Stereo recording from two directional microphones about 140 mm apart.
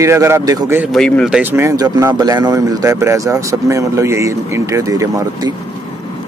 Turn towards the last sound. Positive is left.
turn(degrees=-25)  # may be behind; listen again after turning